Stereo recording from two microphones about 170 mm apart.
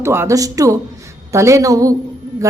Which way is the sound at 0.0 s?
15° right (ahead or behind).